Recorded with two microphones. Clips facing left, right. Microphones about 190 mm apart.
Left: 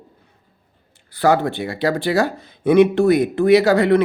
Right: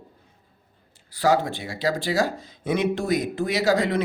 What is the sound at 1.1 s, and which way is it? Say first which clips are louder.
Speech: left 4 dB; 60° left (ahead or behind).